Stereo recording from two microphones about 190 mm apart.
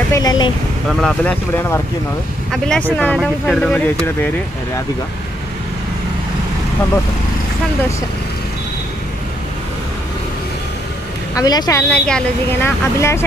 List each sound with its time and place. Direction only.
0.1 s a woman's voice: 20° left (ahead or behind)
1.0 s speech: 10° left (ahead or behind)
11.3 s a woman's voice: 20° left (ahead or behind)
11.9 s speech: 5° left (ahead or behind)